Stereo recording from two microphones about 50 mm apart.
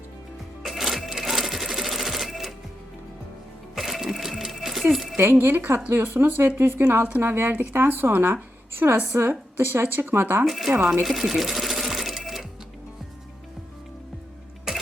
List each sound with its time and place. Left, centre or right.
0.6 s sewing machine: centre
3.8 s sewing machine: centre
5.1 s speech: right
7.2 s speech: right
8.8 s a woman's voice: right
10.4 s speech: centre
11.0 s sewing machine: centre
14.7 s a sound: centre